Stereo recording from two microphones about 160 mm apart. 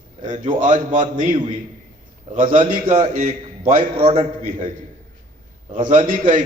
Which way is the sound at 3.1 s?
50° right (ahead or behind).